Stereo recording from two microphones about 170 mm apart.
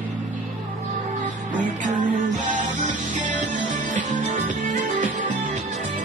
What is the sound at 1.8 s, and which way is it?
Music, 45° right (ahead or behind).